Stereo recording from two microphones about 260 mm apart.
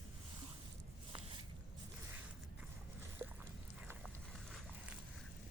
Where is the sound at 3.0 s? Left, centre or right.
Centre.